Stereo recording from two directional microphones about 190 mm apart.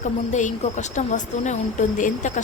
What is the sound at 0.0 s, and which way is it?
A woman's voice, 40° left (ahead or behind).